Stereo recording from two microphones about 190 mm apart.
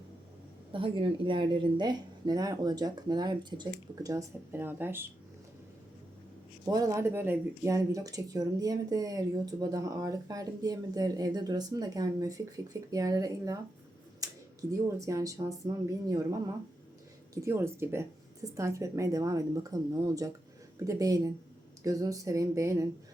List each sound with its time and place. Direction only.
0.7 s speech: 30° right (ahead or behind); by 5.0 s 10° right (ahead or behind)
6.7 s speech: 20° right (ahead or behind)
14.2 s a sound: 20° right (ahead or behind)
14.7 s a woman's voice: 15° right (ahead or behind)
17.3 s a woman's voice: 15° right (ahead or behind)